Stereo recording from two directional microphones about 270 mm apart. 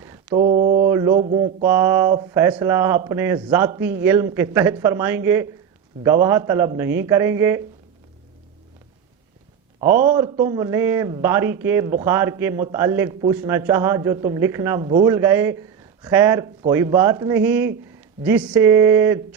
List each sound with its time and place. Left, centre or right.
0.0 s mantra: centre
0.4 s mantra: right
1.6 s a man's voice: centre
9.8 s a man's voice: centre